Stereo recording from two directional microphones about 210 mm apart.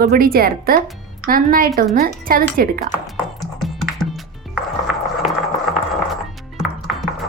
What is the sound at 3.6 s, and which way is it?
Music, centre (ahead or behind).